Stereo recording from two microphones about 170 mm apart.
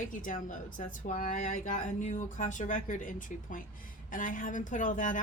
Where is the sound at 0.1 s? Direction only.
50° left (ahead or behind).